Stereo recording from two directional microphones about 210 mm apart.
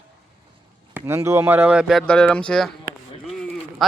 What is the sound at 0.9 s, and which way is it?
A man's voice, 10° right (ahead or behind).